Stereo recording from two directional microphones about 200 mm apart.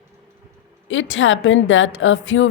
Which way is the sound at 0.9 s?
70° left (ahead or behind).